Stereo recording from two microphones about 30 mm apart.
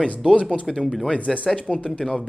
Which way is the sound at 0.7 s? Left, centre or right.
Centre.